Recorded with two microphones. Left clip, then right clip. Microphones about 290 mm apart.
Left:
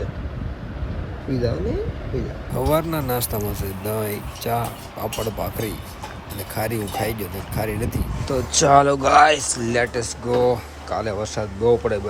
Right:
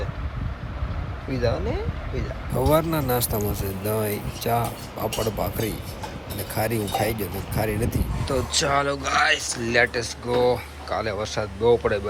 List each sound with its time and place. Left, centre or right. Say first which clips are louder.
2.5 s speech: even; centre